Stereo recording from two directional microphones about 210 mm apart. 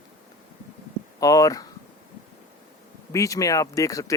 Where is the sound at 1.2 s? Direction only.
15° left (ahead or behind).